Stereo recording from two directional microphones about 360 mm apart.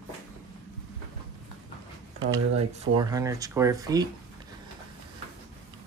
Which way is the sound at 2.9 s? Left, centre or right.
Centre.